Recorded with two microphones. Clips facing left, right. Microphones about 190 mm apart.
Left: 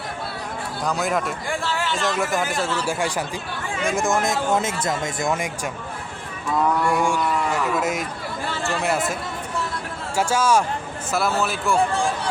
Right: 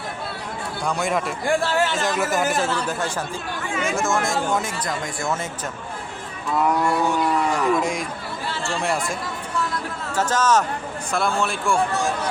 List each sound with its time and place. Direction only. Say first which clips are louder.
0.9 s a man's voice: even; centre (ahead or behind)
1.5 s speech: right 5 dB; 45° right (ahead or behind)
2.1 s a man's voice: right 2 dB; centre (ahead or behind)
2.8 s speech: left 2 dB; 15° left (ahead or behind)
7.0 s a man's voice: right 1 dB; 10° left (ahead or behind)
10.2 s a man's voice: left 1 dB; 10° left (ahead or behind)